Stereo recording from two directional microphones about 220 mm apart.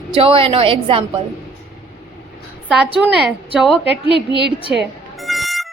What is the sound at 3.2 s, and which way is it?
Speech, centre (ahead or behind).